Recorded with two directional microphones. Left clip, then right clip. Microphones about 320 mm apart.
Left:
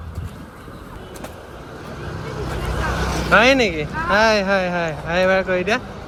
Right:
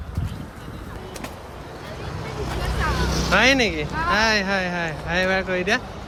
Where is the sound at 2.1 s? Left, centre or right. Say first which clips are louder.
Left 2 dB; right.